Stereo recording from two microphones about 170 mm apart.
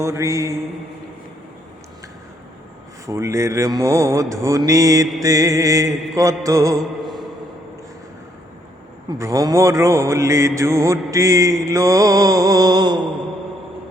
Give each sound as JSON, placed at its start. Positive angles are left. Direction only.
{"t": 0.0, "sound": "mantra", "side_deg": -15}
{"t": 3.1, "sound": "mantra", "side_deg": -15}
{"t": 9.0, "sound": "mantra", "side_deg": -20}